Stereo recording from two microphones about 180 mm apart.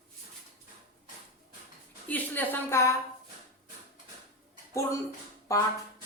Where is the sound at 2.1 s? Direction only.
10° left (ahead or behind).